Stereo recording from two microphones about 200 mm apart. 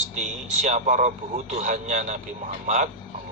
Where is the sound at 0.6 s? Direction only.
35° right (ahead or behind).